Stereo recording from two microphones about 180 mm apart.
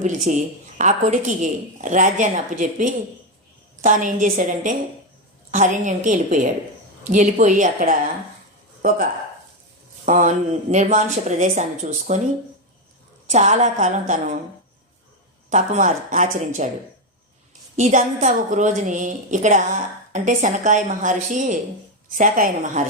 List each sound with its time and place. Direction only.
0.0 s a woman's voice: 45° right (ahead or behind)
10.1 s a woman's voice: 40° right (ahead or behind)
13.3 s a woman's voice: 40° right (ahead or behind)
15.4 s a woman's voice: 45° right (ahead or behind)
17.7 s a woman's voice: 40° right (ahead or behind)